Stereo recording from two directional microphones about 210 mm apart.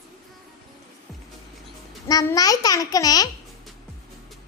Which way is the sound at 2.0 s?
15° left (ahead or behind).